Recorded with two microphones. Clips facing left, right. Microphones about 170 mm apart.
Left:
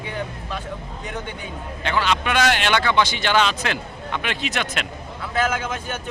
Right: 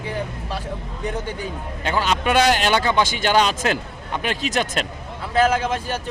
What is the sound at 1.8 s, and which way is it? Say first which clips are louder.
Speech: right 1 dB; 40° right (ahead or behind).